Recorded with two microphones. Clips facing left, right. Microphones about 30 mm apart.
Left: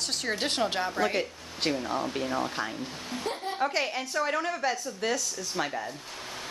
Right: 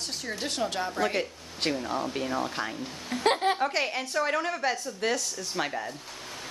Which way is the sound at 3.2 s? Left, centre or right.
Right.